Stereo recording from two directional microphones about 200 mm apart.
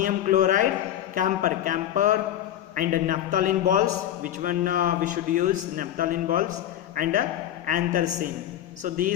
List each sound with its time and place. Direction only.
0.0 s a man's voice: 40° right (ahead or behind)